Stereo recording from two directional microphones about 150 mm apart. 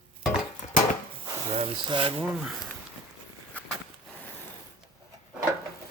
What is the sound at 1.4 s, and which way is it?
Speech, 45° right (ahead or behind).